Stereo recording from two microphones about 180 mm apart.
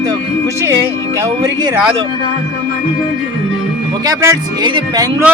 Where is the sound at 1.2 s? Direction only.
20° right (ahead or behind).